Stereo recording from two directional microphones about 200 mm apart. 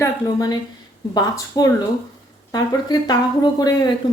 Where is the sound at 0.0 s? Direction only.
20° left (ahead or behind).